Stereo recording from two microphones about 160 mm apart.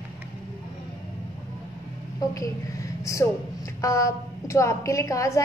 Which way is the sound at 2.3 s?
20° left (ahead or behind).